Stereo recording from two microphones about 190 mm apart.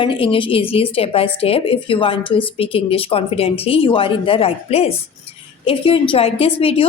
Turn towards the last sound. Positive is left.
turn(degrees=30)  # may be behind; listen again after turning